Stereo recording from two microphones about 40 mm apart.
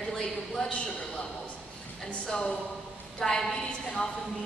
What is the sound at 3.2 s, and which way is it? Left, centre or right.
Speech, centre.